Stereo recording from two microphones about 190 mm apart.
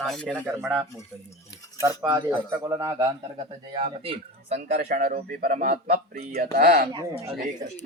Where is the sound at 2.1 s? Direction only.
15° right (ahead or behind).